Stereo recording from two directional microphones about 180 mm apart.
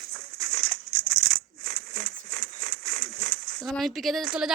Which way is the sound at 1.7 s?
35° right (ahead or behind).